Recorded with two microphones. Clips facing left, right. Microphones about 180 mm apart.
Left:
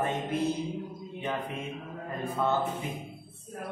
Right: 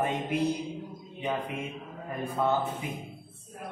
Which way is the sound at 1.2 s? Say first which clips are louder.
Right 2 dB; 10° right (ahead or behind).